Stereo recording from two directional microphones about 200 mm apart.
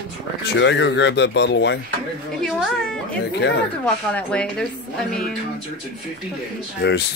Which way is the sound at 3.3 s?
60° left (ahead or behind).